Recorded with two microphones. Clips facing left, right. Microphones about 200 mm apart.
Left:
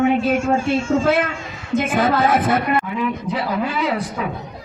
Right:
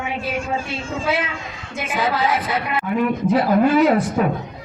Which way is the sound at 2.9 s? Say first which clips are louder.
Right 5 dB; 50° right (ahead or behind).